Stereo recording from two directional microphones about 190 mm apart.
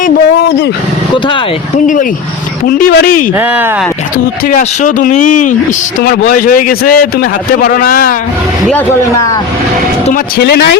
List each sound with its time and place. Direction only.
2.8 s a man's voice: 50° left (ahead or behind)
3.3 s speech: 10° right (ahead or behind)
4.4 s a man's voice: 45° left (ahead or behind)
6.0 s a man's voice: 55° left (ahead or behind)
10.1 s speech: 55° left (ahead or behind)